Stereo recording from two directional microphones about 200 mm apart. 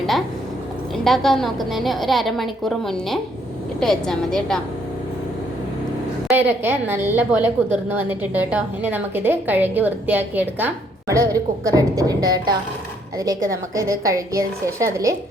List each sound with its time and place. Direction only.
0.9 s a woman's voice: centre (ahead or behind)
6.2 s a woman's voice: 10° right (ahead or behind)